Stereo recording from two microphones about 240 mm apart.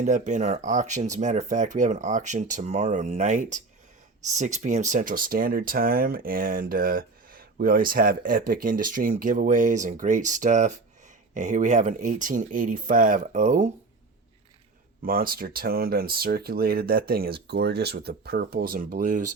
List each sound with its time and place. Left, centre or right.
0.0 s speech: right
15.0 s speech: right